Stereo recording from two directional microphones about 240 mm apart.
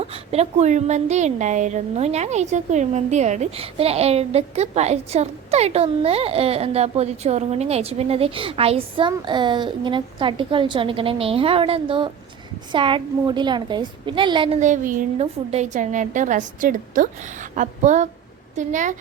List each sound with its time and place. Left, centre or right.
0.0 s a woman's voice: right